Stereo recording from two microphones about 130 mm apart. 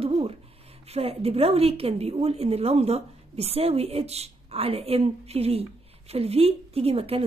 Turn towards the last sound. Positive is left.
turn(degrees=-50)  # may be behind; listen again after turning